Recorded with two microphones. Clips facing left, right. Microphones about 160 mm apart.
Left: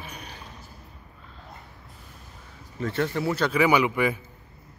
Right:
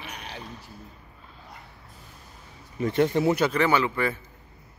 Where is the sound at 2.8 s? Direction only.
15° right (ahead or behind).